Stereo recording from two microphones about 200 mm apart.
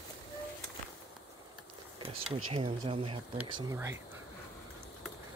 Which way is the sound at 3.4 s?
15° right (ahead or behind).